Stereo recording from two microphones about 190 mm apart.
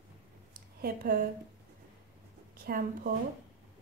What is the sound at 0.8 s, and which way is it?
Speech, 50° right (ahead or behind).